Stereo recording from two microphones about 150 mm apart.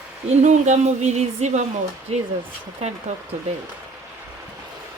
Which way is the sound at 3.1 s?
50° right (ahead or behind).